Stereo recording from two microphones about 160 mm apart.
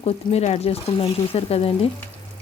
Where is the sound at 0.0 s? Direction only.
40° left (ahead or behind).